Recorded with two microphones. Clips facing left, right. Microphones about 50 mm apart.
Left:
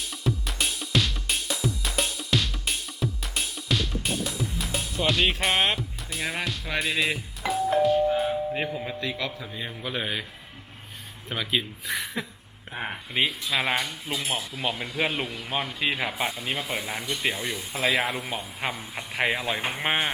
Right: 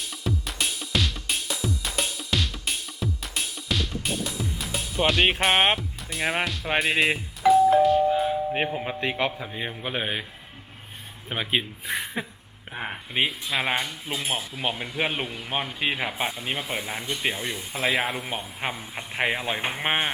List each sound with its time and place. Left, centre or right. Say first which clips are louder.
0.0 s music: left 1 dB; centre
5.0 s speech: right 3 dB; centre
7.4 s doorbell: right 6 dB; centre
8.5 s a man's voice: right 3 dB; right
11.3 s a man's voice: right 1 dB; right
12.7 s speech: even; centre